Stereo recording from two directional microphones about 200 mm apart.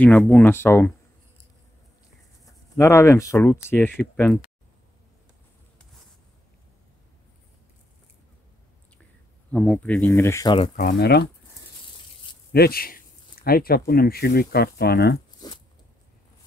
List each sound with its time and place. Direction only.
0.0 s speech: 5° left (ahead or behind)
2.8 s speech: 15° left (ahead or behind)
9.5 s speech: 5° left (ahead or behind)
10.8 s speech: 55° left (ahead or behind)
12.5 s speech: 50° left (ahead or behind)
15.4 s a sound: 20° left (ahead or behind)